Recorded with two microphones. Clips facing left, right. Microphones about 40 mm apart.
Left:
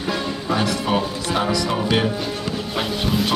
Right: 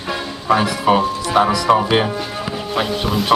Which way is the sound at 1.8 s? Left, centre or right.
Right.